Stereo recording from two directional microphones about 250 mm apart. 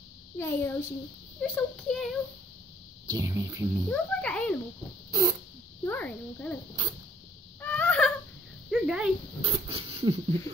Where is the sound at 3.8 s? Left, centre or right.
Centre.